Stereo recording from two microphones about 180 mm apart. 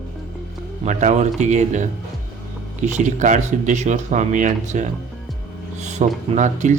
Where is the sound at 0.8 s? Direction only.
40° right (ahead or behind).